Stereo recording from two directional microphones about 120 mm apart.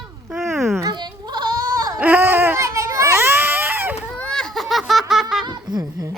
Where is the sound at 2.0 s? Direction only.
15° right (ahead or behind).